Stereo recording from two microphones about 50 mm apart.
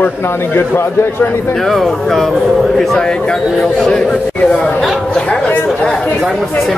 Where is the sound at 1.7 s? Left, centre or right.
Centre.